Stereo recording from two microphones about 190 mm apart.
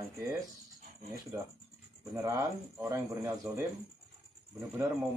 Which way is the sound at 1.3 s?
15° right (ahead or behind).